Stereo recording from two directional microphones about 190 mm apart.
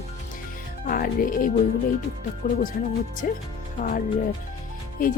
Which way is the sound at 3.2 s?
50° left (ahead or behind).